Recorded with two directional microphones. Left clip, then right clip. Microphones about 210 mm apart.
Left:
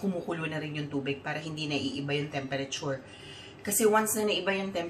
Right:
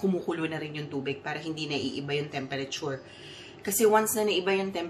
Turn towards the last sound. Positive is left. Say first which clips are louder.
# right 2 dB
turn(degrees=-30)  # may be behind; listen again after turning